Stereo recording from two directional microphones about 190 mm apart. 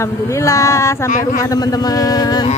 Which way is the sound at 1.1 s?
45° left (ahead or behind).